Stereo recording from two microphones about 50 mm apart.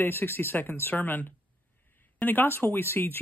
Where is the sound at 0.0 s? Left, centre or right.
Left.